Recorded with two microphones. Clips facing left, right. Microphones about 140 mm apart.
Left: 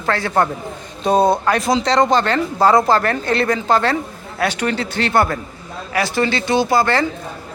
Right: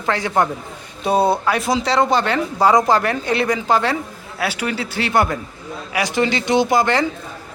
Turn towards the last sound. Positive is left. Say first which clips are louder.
# even
turn(degrees=-15)  # may be behind; listen again after turning